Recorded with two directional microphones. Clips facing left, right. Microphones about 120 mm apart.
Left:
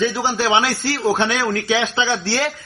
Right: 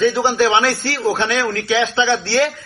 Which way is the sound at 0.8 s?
15° left (ahead or behind).